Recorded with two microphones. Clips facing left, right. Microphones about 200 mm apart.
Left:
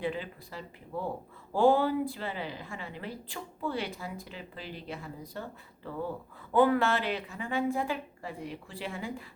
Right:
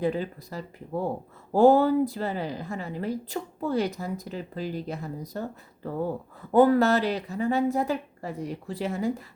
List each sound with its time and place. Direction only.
0.0 s a woman's voice: 40° right (ahead or behind)